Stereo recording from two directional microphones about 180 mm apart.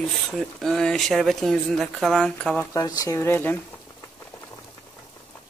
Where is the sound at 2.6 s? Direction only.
20° left (ahead or behind).